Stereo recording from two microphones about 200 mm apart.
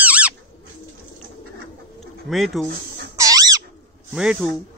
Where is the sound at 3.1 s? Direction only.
15° right (ahead or behind).